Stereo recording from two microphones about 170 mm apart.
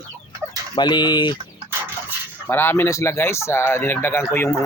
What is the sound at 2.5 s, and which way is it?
Speech, 15° left (ahead or behind).